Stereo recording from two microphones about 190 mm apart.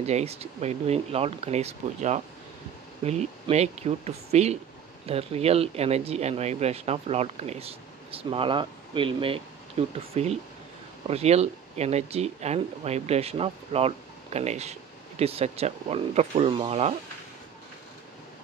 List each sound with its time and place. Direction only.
0.0 s speech: 35° right (ahead or behind)